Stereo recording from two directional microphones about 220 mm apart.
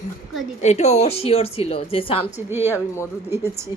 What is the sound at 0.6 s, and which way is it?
Speech, 30° left (ahead or behind).